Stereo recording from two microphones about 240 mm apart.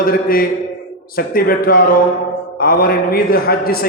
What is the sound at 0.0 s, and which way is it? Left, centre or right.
A man's voice, left.